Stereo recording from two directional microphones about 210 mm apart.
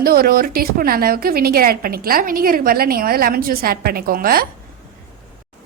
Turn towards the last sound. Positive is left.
turn(degrees=-45)  # may be behind; listen again after turning